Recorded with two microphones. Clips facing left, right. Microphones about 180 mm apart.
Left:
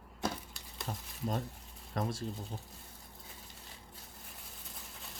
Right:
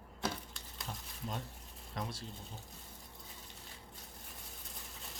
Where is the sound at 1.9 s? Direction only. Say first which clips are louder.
Left 6 dB; 45° left (ahead or behind).